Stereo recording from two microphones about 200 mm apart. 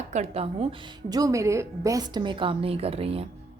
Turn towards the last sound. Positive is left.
turn(degrees=-30)  # may be behind; listen again after turning